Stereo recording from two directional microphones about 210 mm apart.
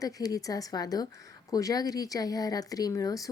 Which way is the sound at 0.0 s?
15° left (ahead or behind).